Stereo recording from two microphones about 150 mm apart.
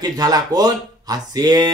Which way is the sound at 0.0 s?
25° right (ahead or behind).